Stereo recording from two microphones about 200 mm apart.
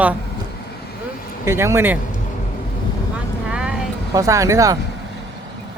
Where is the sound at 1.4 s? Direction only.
15° right (ahead or behind).